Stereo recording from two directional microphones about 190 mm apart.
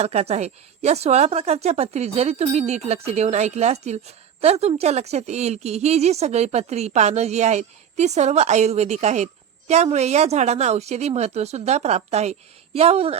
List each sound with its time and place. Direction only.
0.0 s speech: 35° right (ahead or behind)